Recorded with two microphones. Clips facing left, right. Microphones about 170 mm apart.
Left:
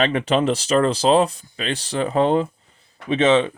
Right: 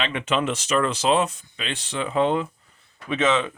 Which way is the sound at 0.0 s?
40° left (ahead or behind).